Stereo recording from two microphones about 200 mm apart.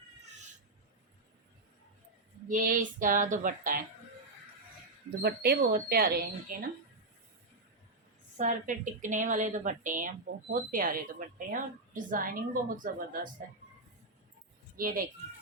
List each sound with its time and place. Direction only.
2.5 s a woman's voice: 40° right (ahead or behind)
5.2 s speech: 50° right (ahead or behind)
8.4 s a woman's voice: 40° right (ahead or behind)
14.8 s speech: 45° right (ahead or behind)